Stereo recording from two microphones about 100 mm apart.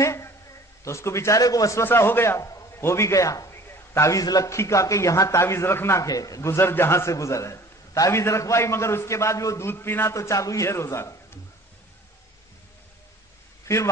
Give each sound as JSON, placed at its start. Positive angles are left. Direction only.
{"t": 0.0, "sound": "a sound", "side_deg": 30}
{"t": 0.8, "sound": "a man's voice", "side_deg": 30}
{"t": 1.9, "sound": "a man's voice", "side_deg": 20}
{"t": 6.0, "sound": "a man's voice", "side_deg": 35}
{"t": 13.7, "sound": "a man's voice", "side_deg": 25}